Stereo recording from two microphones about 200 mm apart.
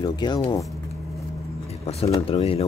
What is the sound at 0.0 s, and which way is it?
Speech, 20° left (ahead or behind).